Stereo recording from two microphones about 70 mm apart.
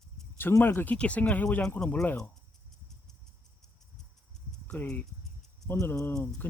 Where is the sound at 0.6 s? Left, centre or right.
Left.